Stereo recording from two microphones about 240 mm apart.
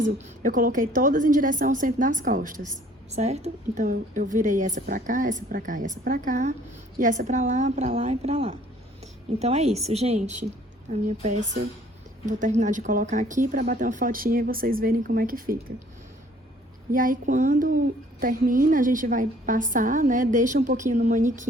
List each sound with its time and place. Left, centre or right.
0.4 s a woman's voice: right
12.2 s speech: right
16.9 s speech: right